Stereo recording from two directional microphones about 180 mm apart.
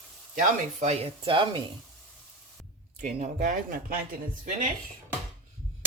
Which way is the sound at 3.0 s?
45° right (ahead or behind).